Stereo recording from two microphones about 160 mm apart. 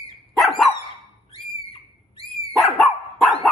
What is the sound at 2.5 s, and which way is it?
Dog, centre (ahead or behind).